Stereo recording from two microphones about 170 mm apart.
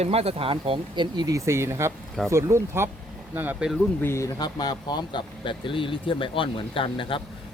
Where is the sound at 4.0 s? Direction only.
15° left (ahead or behind); by 7.2 s 30° left (ahead or behind).